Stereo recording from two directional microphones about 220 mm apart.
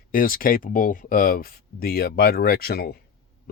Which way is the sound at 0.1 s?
40° left (ahead or behind).